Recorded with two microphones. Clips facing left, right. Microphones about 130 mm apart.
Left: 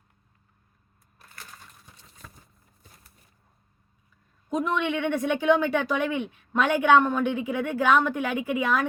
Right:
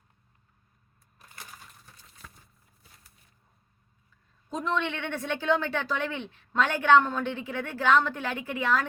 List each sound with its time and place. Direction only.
4.4 s a woman's voice: 10° left (ahead or behind)